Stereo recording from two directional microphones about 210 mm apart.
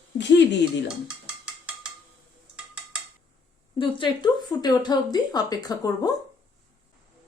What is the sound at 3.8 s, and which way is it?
A woman's voice, 25° left (ahead or behind).